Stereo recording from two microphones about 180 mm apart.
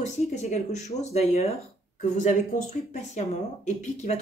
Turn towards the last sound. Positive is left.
turn(degrees=40)  # may be behind; listen again after turning